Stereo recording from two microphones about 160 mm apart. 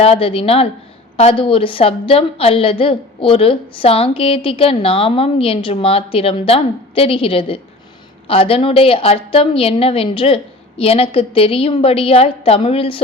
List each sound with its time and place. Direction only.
0.0 s a woman's voice: 35° left (ahead or behind)